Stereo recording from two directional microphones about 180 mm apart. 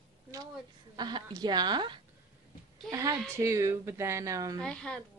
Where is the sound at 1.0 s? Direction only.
25° right (ahead or behind).